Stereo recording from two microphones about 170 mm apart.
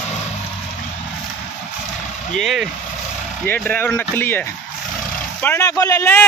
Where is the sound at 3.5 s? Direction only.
10° left (ahead or behind).